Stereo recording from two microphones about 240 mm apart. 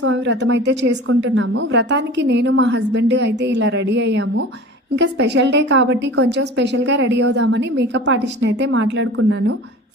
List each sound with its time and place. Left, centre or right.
0.0 s a woman's voice: right